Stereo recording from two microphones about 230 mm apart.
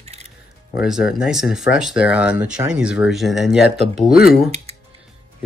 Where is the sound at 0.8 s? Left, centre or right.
Centre.